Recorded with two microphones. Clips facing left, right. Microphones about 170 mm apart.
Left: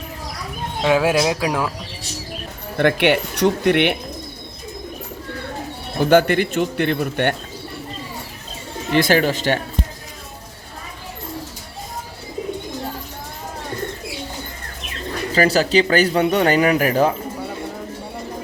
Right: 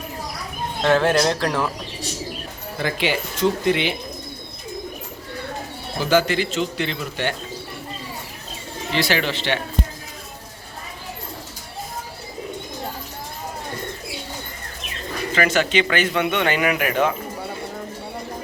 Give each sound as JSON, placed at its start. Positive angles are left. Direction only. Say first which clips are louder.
{"t": 0.8, "sound": "speech", "louder": "left 1 dB", "side_deg": 10}
{"t": 2.7, "sound": "speech", "louder": "left 7 dB", "side_deg": 65}
{"t": 6.0, "sound": "speech", "louder": "left 5 dB", "side_deg": 55}
{"t": 8.9, "sound": "speech", "louder": "left 6 dB", "side_deg": 50}
{"t": 15.3, "sound": "speech", "louder": "left 4 dB", "side_deg": 35}